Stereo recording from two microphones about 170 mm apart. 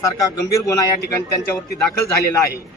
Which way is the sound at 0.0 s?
20° left (ahead or behind).